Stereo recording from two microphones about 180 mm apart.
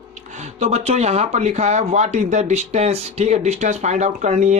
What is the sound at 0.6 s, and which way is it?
Speech, 35° right (ahead or behind).